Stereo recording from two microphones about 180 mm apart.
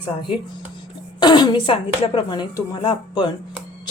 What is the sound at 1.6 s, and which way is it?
Speech, 30° left (ahead or behind).